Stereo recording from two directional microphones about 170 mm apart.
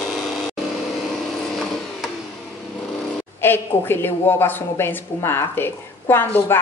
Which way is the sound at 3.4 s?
15° left (ahead or behind).